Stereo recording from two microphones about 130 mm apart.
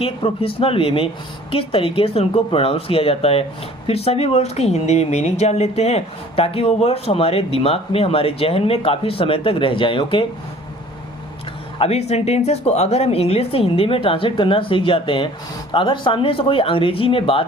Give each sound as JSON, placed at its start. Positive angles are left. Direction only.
{"t": 0.0, "sound": "speech", "side_deg": 45}
{"t": 11.8, "sound": "speech", "side_deg": 55}